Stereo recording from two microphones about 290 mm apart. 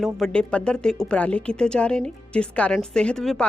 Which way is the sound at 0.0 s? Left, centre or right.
Centre.